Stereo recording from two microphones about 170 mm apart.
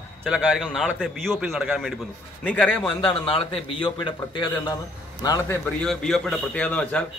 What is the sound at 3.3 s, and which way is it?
A man's voice, 30° left (ahead or behind).